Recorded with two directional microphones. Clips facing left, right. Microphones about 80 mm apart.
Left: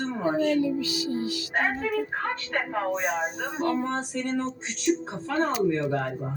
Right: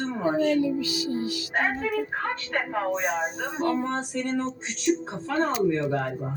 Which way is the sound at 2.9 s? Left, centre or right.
Right.